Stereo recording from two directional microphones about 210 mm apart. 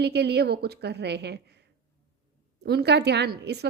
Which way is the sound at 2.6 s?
50° right (ahead or behind).